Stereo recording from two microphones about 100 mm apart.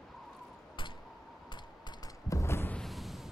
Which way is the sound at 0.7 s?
55° left (ahead or behind).